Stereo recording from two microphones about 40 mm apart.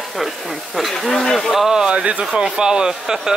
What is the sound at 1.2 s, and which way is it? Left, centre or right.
Speech, centre.